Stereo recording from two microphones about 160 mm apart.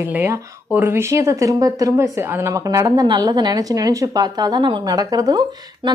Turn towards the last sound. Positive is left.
turn(degrees=-25)  # may be behind; listen again after turning